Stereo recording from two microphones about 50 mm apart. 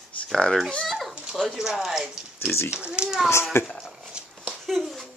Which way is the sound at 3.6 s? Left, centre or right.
Left.